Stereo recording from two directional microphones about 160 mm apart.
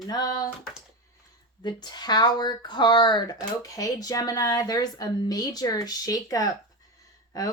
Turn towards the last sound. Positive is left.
turn(degrees=20)  # may be behind; listen again after turning